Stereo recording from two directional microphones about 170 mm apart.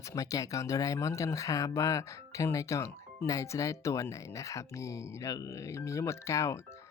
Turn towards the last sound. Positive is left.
turn(degrees=20)  # may be behind; listen again after turning